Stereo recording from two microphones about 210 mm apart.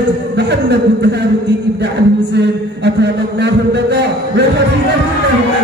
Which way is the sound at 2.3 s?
55° right (ahead or behind).